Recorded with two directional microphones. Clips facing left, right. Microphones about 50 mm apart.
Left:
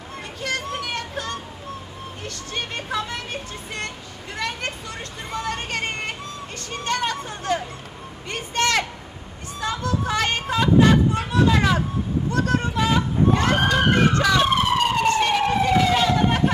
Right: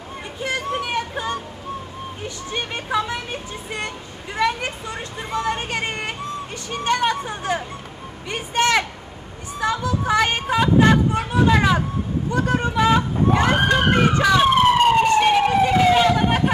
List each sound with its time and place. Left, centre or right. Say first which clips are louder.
0.4 s a sound: right 3 dB; centre
2.2 s speech: right 2 dB; centre
15.0 s emergency vehicle: right 3 dB; centre